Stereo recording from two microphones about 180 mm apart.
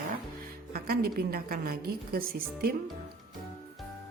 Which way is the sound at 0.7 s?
60° right (ahead or behind).